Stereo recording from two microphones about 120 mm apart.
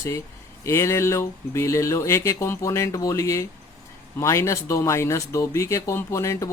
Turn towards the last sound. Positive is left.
turn(degrees=25)  # may be behind; listen again after turning